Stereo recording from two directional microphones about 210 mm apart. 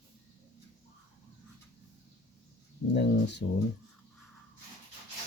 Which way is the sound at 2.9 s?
55° left (ahead or behind).